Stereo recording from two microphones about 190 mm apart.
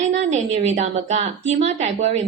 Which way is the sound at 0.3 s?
35° right (ahead or behind).